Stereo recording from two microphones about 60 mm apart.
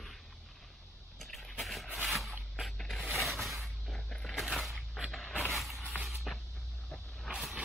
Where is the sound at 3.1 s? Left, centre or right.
Centre.